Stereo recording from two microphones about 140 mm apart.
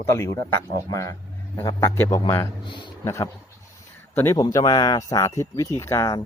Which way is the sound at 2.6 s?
35° left (ahead or behind).